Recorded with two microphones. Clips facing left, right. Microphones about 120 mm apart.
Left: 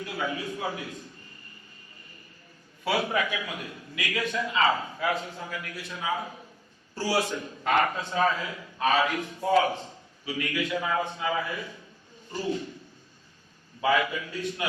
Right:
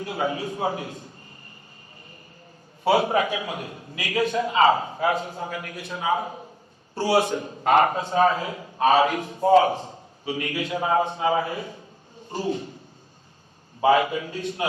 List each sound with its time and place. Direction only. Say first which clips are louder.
0.0 s a man's voice: right 5 dB; 30° right (ahead or behind)
2.8 s a man's voice: right 7 dB; 30° right (ahead or behind)
13.8 s a man's voice: right 6 dB; 30° right (ahead or behind)